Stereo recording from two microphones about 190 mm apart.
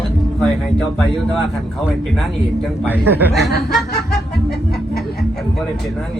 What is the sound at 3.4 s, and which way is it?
Speech, 60° left (ahead or behind).